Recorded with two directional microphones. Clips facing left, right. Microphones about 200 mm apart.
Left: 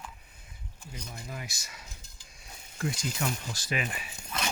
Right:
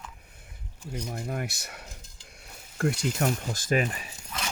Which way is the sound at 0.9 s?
60° right (ahead or behind).